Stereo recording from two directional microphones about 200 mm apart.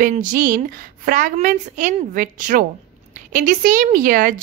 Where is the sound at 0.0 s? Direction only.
40° right (ahead or behind).